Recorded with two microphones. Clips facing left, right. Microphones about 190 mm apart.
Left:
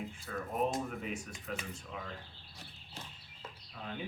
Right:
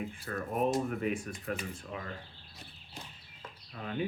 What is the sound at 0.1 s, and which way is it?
Speech, 55° right (ahead or behind).